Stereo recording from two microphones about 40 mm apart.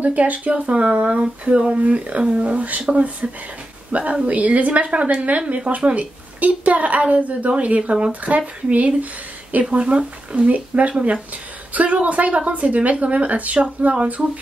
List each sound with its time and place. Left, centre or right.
0.0 s speech: right